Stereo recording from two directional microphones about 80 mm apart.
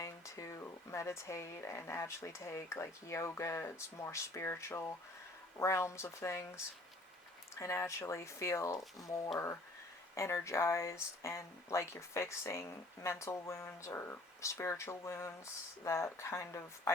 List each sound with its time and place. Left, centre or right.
0.0 s speech: left
7.6 s speech: left